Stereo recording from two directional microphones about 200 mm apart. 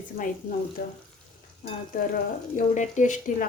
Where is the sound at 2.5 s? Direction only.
35° left (ahead or behind).